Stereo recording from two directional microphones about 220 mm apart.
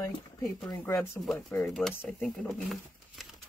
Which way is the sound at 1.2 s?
Centre (ahead or behind).